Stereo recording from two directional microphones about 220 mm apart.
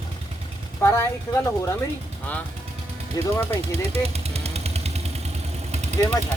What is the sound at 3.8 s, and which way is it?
Vehicle, 30° right (ahead or behind).